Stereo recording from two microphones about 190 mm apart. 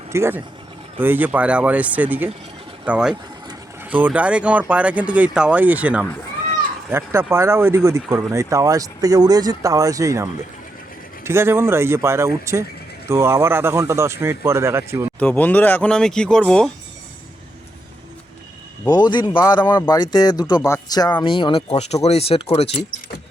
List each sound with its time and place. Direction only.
0.1 s speech: 10° right (ahead or behind)
15.2 s speech: 5° left (ahead or behind)
18.9 s speech: 20° left (ahead or behind)